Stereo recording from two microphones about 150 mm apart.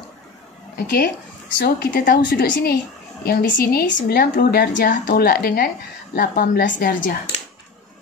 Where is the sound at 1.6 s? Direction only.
90° left.